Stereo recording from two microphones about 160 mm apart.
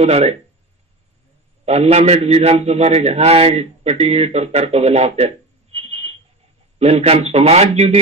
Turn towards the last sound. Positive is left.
turn(degrees=-40)  # may be behind; listen again after turning